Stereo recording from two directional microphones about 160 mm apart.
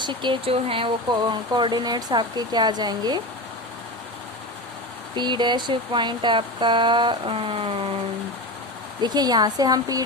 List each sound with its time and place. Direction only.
0.0 s speech: 30° right (ahead or behind)
5.1 s speech: 30° right (ahead or behind)
9.0 s speech: 25° right (ahead or behind)